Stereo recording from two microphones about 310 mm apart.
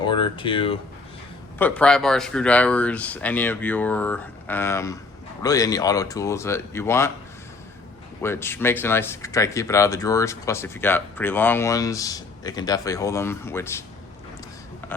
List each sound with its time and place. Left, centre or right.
0.0 s speech: centre
1.5 s speech: centre
8.2 s speech: centre